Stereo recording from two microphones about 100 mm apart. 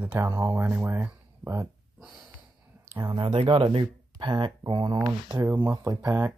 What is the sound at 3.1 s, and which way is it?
Speech, 60° right (ahead or behind).